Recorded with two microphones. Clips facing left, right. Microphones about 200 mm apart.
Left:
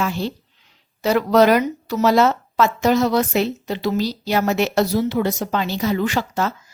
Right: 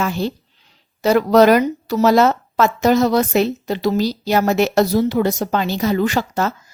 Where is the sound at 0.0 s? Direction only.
45° right (ahead or behind).